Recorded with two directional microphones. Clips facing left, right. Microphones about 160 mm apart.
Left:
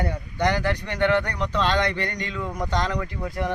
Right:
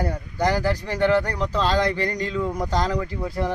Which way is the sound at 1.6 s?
35° right (ahead or behind).